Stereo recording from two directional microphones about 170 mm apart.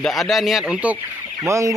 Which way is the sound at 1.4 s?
20° right (ahead or behind).